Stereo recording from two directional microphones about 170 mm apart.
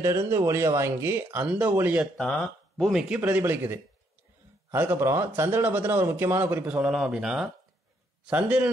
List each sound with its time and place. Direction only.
0.3 s a man's voice: 15° right (ahead or behind)
2.1 s a man's voice: 5° left (ahead or behind)